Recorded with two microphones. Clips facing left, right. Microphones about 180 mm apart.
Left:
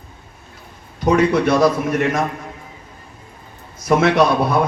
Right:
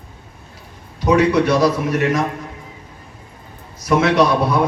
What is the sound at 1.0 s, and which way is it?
A man's voice, 50° left (ahead or behind).